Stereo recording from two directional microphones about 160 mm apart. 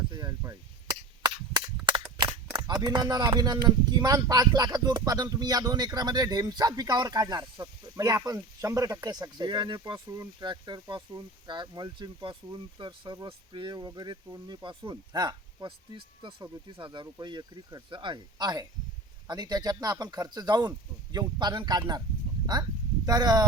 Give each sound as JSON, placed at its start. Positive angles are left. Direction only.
{"t": 0.1, "sound": "cap gun", "side_deg": -25}
{"t": 2.8, "sound": "speech", "side_deg": -25}
{"t": 23.0, "sound": "speech", "side_deg": -25}